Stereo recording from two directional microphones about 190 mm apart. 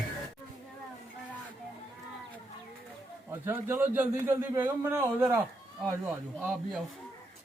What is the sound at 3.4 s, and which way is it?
A man's voice, 10° right (ahead or behind).